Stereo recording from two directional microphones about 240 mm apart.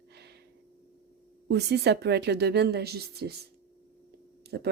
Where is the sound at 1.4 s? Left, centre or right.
Right.